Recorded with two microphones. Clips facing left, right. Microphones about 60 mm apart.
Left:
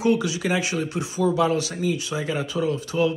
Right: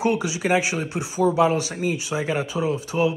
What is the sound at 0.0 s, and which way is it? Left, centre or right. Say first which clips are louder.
Speech: left 1 dB; right.